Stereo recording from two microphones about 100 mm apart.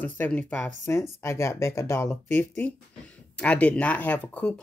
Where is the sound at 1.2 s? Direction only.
30° left (ahead or behind).